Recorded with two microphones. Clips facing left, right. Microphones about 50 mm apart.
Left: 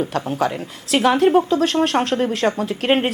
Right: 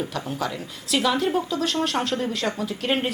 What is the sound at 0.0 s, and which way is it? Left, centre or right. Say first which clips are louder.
Speech: left 7 dB; left.